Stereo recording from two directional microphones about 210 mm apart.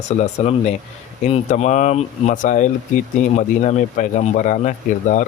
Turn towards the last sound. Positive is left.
turn(degrees=35)  # may be behind; listen again after turning